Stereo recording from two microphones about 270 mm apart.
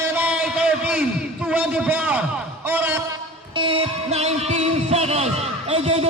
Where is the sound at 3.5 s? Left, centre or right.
Centre.